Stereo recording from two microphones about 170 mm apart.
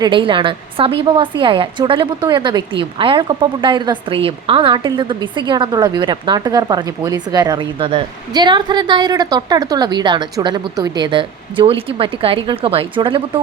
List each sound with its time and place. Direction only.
0.0 s a woman's voice: 30° right (ahead or behind)